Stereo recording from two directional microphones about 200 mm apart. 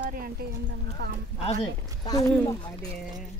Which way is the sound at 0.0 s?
45° right (ahead or behind).